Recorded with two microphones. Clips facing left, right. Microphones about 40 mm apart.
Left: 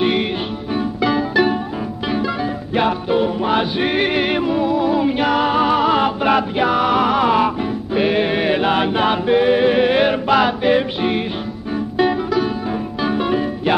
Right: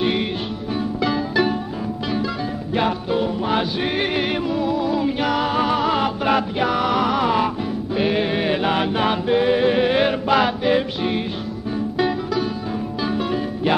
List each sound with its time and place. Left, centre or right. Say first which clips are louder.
1.1 s music: left 5 dB; centre
2.7 s music: left 3 dB; centre